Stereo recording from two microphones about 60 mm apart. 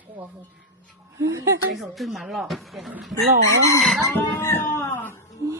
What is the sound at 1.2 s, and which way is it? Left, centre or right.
Speech, right.